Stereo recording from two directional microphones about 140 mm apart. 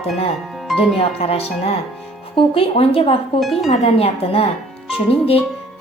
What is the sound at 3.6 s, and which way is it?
Speech, 45° left (ahead or behind).